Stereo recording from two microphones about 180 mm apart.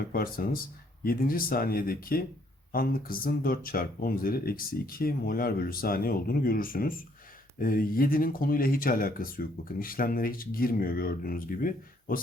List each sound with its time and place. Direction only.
0.1 s speech: 55° left (ahead or behind)